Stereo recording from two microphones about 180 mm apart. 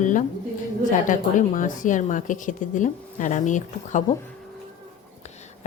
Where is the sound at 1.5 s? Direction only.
45° left (ahead or behind).